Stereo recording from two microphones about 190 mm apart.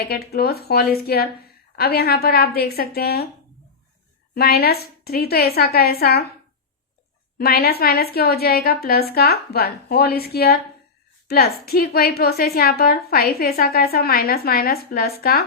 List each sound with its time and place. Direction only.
0.0 s a woman's voice: 55° left (ahead or behind)
4.4 s a woman's voice: 55° left (ahead or behind)
7.3 s a woman's voice: 55° left (ahead or behind)